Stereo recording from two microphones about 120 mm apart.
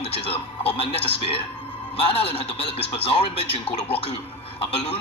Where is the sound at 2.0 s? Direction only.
50° left (ahead or behind).